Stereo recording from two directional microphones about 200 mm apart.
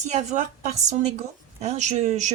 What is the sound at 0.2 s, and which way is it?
Speech, 35° right (ahead or behind).